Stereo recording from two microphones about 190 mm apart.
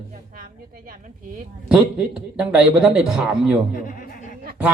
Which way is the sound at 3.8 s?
45° left (ahead or behind).